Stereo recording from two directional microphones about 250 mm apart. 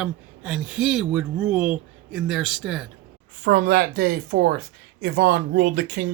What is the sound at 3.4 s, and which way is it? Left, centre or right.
Speech, right.